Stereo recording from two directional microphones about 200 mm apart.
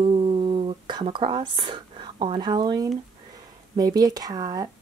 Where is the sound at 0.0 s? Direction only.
25° right (ahead or behind).